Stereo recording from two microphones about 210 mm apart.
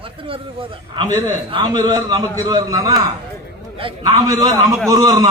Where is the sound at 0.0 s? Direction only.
25° right (ahead or behind).